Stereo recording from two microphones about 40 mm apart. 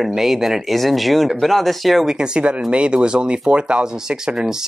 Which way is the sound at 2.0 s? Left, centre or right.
Right.